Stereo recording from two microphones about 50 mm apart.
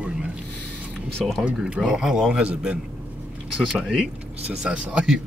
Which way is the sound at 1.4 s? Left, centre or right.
Centre.